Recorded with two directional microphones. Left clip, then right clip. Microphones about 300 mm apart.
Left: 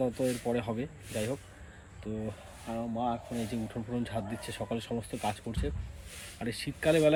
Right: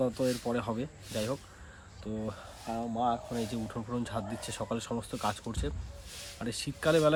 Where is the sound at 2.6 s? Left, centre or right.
Right.